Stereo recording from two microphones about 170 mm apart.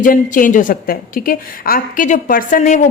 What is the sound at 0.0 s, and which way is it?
A woman's voice, 50° left (ahead or behind).